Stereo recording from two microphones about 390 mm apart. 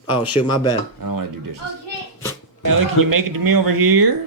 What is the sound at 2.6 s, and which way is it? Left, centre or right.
Speech, right.